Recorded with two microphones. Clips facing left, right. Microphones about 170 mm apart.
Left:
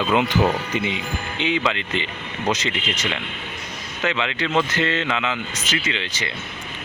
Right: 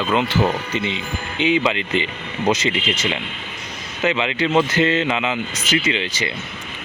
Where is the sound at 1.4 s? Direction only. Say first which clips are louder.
Right 5 dB; 10° right (ahead or behind).